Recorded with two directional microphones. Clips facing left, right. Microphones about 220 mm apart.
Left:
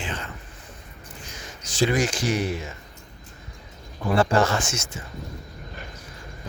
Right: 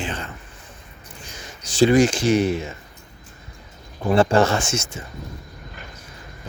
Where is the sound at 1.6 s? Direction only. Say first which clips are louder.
Right 7 dB; 30° right (ahead or behind).